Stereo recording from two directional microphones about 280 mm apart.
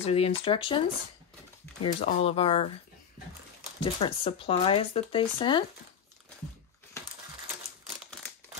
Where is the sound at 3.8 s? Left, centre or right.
Centre.